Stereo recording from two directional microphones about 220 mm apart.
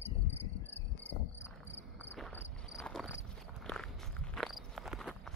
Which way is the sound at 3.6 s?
5° left (ahead or behind).